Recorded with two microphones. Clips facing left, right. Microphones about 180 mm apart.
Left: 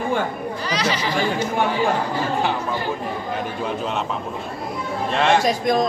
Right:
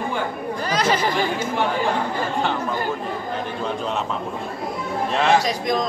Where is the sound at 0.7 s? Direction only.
50° right (ahead or behind).